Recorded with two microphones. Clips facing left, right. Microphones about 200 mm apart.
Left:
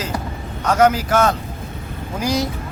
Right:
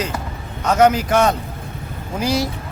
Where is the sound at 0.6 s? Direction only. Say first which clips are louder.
Right 1 dB; 10° right (ahead or behind).